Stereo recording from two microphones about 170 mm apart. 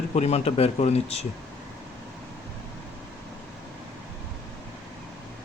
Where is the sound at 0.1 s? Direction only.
40° left (ahead or behind).